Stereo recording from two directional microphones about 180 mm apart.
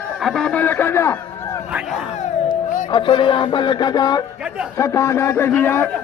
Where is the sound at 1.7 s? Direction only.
5° right (ahead or behind).